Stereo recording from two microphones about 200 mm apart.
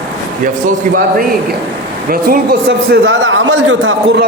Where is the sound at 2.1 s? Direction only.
50° right (ahead or behind).